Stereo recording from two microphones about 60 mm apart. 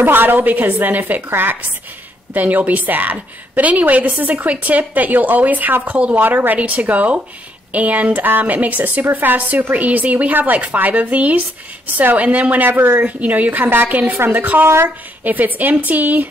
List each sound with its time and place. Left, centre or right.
0.0 s a woman's voice: right